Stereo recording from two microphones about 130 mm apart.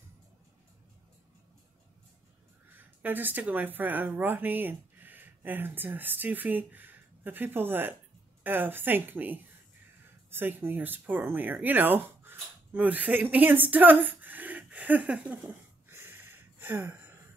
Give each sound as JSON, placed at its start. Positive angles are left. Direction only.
{"t": 2.8, "sound": "a woman's voice", "side_deg": -15}